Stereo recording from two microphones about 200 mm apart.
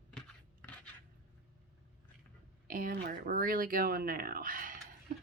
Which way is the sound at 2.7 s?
45° right (ahead or behind).